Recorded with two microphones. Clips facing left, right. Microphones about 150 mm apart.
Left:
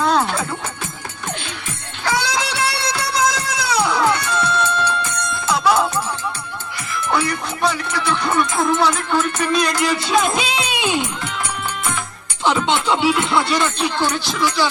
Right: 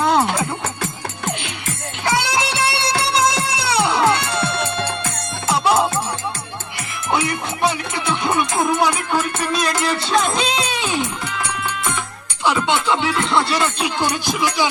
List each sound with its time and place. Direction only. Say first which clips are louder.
0.0 s music: right 1 dB; 20° right (ahead or behind)
2.0 s music: right 1 dB; 20° right (ahead or behind)
7.1 s music: even; 20° right (ahead or behind); by 9.7 s centre (ahead or behind)
9.8 s speech: left 1 dB; centre (ahead or behind)
10.7 s music: left 2 dB; 15° left (ahead or behind)
12.9 s music: left 4 dB; 15° left (ahead or behind)
13.5 s music: left 1 dB; 5° right (ahead or behind)